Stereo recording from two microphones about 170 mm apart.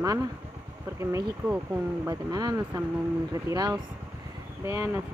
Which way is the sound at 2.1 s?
25° right (ahead or behind).